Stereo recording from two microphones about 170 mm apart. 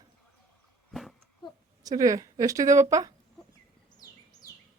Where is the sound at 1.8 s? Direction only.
20° right (ahead or behind).